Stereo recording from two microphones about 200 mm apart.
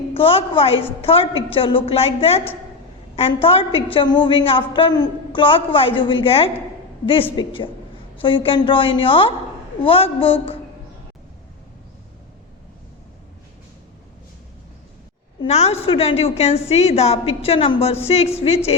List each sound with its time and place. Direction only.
0.1 s a woman's voice: 25° left (ahead or behind)
15.4 s a woman's voice: 30° left (ahead or behind)